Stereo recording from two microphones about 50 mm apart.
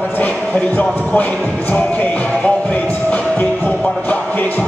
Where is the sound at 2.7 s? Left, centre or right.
Left.